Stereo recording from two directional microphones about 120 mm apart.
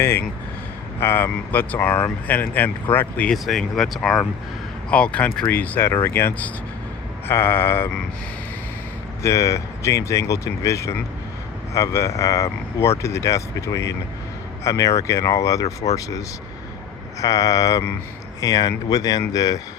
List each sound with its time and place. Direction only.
0.0 s speech: 20° left (ahead or behind)
3.3 s speech: centre (ahead or behind); by 7.9 s 20° left (ahead or behind)
9.2 s speech: 25° left (ahead or behind)